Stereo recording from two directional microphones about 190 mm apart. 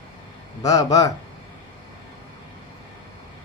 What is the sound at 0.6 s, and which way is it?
Speech, 20° left (ahead or behind).